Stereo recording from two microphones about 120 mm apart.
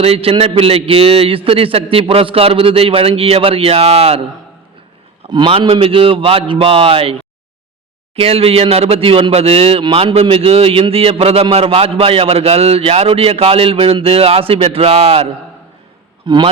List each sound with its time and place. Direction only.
0.0 s speech: 55° right (ahead or behind)
5.3 s speech: 45° right (ahead or behind); by 15.3 s 60° right (ahead or behind)
16.2 s a man's voice: 40° right (ahead or behind)